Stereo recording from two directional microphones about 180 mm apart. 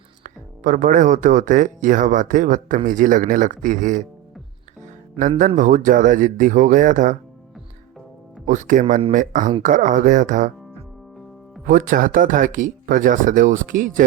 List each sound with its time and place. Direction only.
0.2 s speech: 45° right (ahead or behind)
5.1 s speech: 35° right (ahead or behind)
5.5 s speech: 45° right (ahead or behind)
8.4 s speech: 45° right (ahead or behind)
11.6 s speech: 50° right (ahead or behind)